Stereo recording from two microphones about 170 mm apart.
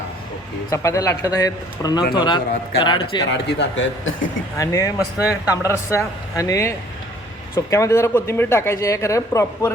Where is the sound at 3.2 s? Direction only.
90° left.